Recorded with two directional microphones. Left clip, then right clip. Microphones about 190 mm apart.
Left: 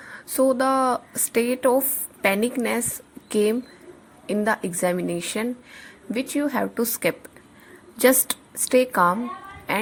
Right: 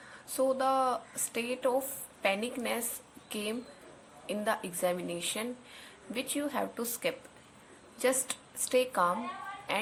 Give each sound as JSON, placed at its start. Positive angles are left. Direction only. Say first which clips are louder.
{"t": 0.3, "sound": "a woman's voice", "louder": "left 9 dB", "side_deg": 45}